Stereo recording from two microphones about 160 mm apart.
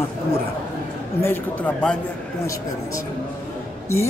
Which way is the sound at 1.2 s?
10° left (ahead or behind).